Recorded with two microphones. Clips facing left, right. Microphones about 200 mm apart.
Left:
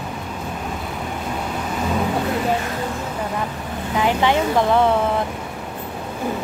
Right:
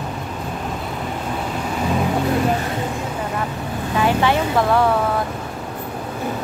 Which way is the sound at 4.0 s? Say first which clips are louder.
Even; 15° left (ahead or behind).